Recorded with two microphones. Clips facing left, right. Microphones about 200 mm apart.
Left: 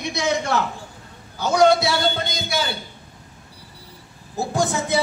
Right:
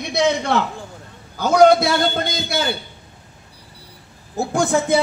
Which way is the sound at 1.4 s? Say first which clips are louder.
Right 4 dB; 50° right (ahead or behind).